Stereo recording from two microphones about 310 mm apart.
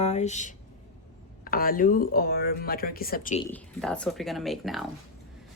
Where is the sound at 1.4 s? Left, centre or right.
Left.